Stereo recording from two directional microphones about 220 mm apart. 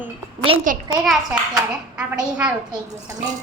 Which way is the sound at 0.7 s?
40° right (ahead or behind).